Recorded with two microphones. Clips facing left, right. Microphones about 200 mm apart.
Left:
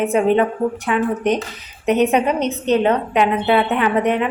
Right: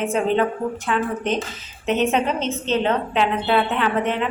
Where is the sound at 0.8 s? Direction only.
15° left (ahead or behind).